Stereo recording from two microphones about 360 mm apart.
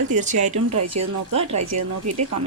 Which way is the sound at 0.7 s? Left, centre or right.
Right.